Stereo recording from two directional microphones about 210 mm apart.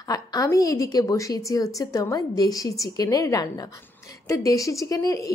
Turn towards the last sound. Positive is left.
turn(degrees=15)  # may be behind; listen again after turning